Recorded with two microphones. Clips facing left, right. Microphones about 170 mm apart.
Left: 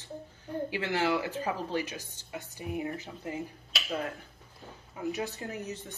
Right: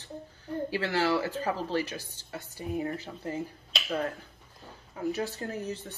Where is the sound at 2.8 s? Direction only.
15° left (ahead or behind).